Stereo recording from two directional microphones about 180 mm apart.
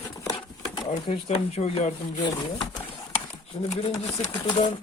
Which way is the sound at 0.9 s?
35° left (ahead or behind).